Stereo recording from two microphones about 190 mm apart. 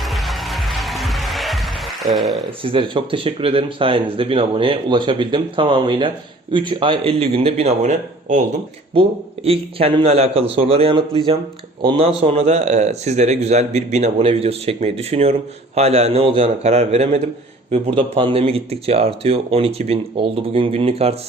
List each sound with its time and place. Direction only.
0.0 s music: centre (ahead or behind)
2.1 s speech: centre (ahead or behind)
2.6 s a man's voice: 25° right (ahead or behind)